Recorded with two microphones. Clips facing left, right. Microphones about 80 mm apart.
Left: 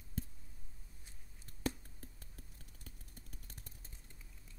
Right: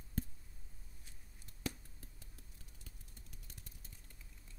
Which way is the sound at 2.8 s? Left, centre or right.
Left.